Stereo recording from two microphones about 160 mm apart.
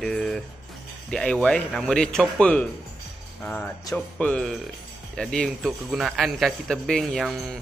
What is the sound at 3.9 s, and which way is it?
A man's voice, 10° left (ahead or behind).